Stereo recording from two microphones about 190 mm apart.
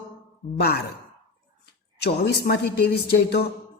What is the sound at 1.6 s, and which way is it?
A woman's voice, 60° left (ahead or behind).